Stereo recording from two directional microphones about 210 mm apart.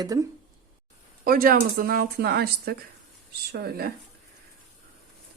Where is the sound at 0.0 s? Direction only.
15° right (ahead or behind).